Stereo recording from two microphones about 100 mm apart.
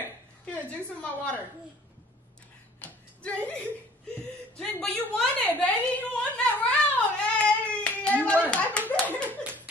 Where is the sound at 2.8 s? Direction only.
15° left (ahead or behind).